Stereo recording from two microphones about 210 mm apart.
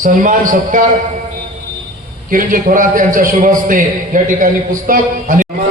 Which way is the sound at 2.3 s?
40° right (ahead or behind).